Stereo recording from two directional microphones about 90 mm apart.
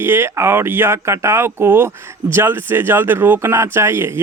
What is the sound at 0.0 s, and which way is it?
A man's voice, 25° right (ahead or behind).